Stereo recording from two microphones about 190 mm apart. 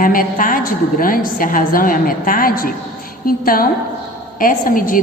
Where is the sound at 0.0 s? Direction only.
45° left (ahead or behind).